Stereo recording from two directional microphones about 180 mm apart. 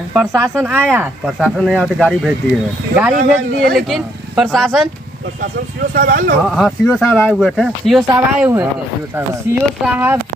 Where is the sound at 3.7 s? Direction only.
Centre (ahead or behind).